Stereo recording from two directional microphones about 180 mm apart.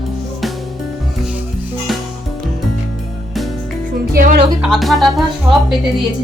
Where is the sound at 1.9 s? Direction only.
Centre (ahead or behind).